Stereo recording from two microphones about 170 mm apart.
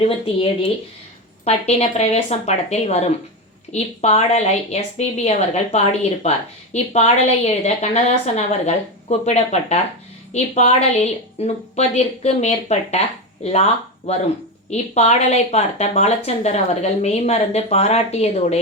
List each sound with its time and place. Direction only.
0.0 s a woman's voice: 35° left (ahead or behind)
14.7 s a woman's voice: 40° left (ahead or behind)